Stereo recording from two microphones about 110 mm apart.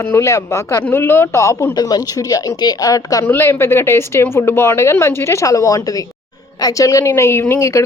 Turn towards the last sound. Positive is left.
turn(degrees=25)  # may be behind; listen again after turning